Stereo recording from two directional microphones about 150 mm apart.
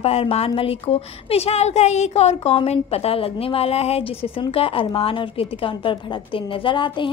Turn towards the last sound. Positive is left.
turn(degrees=35)  # may be behind; listen again after turning